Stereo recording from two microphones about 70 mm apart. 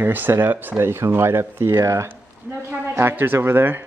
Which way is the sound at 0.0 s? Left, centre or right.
Right.